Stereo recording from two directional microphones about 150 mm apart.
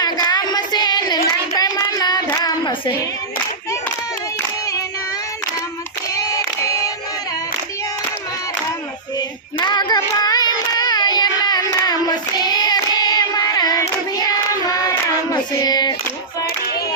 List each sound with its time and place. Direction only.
0.0 s child singing: 25° left (ahead or behind)
6.1 s music: 20° left (ahead or behind)
9.1 s child singing: 30° left (ahead or behind)